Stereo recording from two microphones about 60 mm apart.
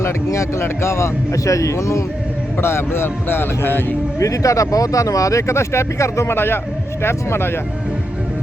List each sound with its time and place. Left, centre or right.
0.0 s speech: left
2.6 s speech: left
4.2 s speech: left
6.3 s speech: left